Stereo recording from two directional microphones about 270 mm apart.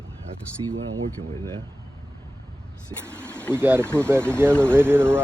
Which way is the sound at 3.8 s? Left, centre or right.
Centre.